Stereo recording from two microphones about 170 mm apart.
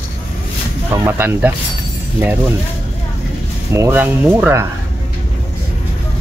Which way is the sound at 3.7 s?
15° right (ahead or behind).